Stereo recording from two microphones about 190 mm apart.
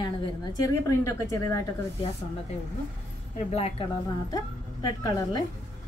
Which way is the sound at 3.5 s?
35° left (ahead or behind).